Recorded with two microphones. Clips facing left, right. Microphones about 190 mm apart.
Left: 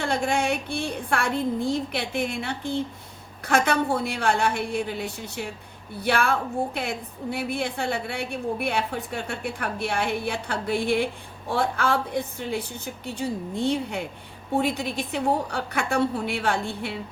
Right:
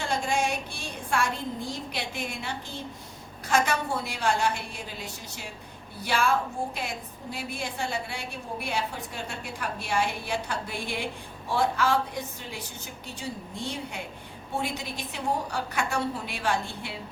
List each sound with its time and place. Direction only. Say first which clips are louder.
0.0 s a woman's voice: left 3 dB; 60° left (ahead or behind)